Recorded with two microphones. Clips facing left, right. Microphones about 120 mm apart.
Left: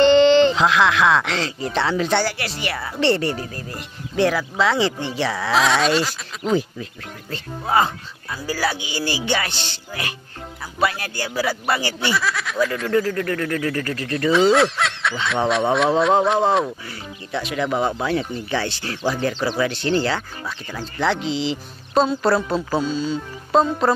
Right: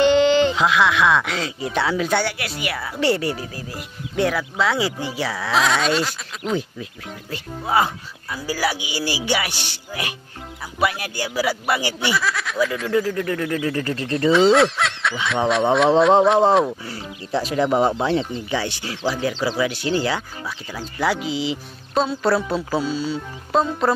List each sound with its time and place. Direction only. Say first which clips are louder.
0.0 s speech: left 3 dB; 10° right (ahead or behind)
13.3 s speech: even; 15° right (ahead or behind)
14.3 s speech: right 1 dB; centre (ahead or behind)
16.8 s speech: right 2 dB; 30° right (ahead or behind)
18.5 s speech: left 3 dB; 15° right (ahead or behind)